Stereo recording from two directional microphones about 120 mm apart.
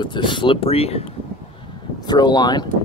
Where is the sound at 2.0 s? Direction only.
35° left (ahead or behind).